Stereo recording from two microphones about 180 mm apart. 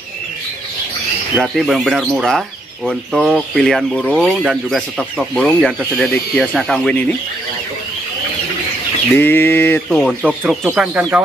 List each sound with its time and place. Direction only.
1.4 s speech: centre (ahead or behind)
9.2 s a sound: 10° left (ahead or behind)
9.9 s speech: 5° right (ahead or behind)